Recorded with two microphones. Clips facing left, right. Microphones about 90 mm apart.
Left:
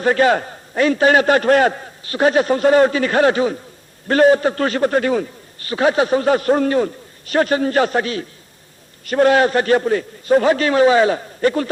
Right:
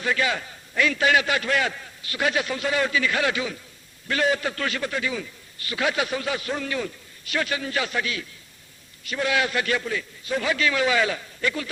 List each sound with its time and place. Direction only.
0.0 s a man's voice: 45° left (ahead or behind)